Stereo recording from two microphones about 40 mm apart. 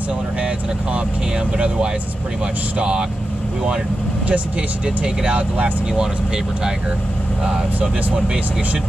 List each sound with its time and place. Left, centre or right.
2.8 s speech: right
4.3 s speech: right
7.4 s speech: right